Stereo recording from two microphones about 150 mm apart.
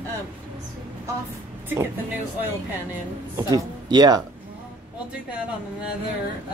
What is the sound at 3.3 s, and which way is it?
Speech, 25° right (ahead or behind).